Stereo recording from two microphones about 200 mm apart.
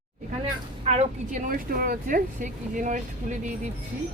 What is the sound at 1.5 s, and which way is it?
Speech, 45° right (ahead or behind).